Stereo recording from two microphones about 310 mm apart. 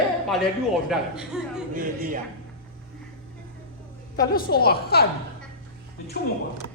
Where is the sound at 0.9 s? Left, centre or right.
Centre.